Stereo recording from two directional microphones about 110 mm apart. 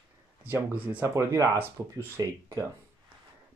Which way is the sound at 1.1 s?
25° right (ahead or behind).